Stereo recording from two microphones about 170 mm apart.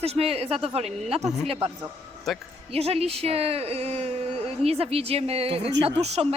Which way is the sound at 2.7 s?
35° right (ahead or behind).